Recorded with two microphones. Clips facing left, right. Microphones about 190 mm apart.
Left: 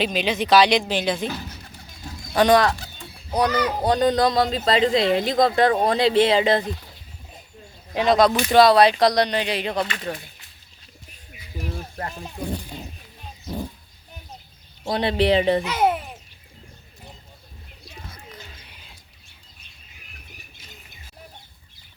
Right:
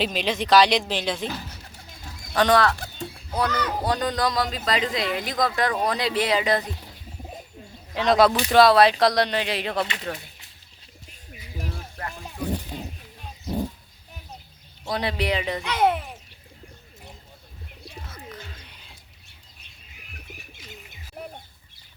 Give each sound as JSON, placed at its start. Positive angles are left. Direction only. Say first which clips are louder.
{"t": 0.0, "sound": "speech", "louder": "left 2 dB", "side_deg": 0}
{"t": 2.3, "sound": "speech", "louder": "left 3 dB", "side_deg": 15}
{"t": 2.7, "sound": "bird", "louder": "right 6 dB", "side_deg": -50}
{"t": 3.3, "sound": "speech", "louder": "left 4 dB", "side_deg": 15}
{"t": 8.0, "sound": "speech", "louder": "left 1 dB", "side_deg": 0}
{"t": 11.9, "sound": "speech", "louder": "left 2 dB", "side_deg": 30}
{"t": 14.8, "sound": "speech", "louder": "left 6 dB", "side_deg": 25}
{"t": 15.6, "sound": "speech", "louder": "left 1 dB", "side_deg": 5}
{"t": 18.1, "sound": "bird", "louder": "right 3 dB", "side_deg": 15}